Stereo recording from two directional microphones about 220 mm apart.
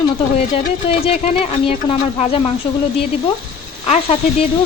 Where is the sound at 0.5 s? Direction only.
25° left (ahead or behind).